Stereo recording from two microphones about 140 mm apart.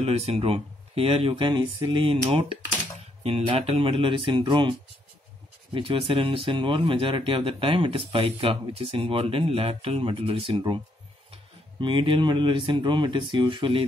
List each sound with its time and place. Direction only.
0.0 s speech: 45° right (ahead or behind)
11.8 s speech: 35° right (ahead or behind)